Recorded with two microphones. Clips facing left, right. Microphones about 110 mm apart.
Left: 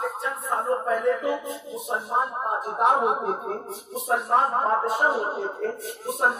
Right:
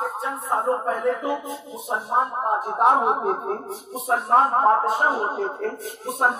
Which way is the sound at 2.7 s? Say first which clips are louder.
Right 2 dB; 40° right (ahead or behind).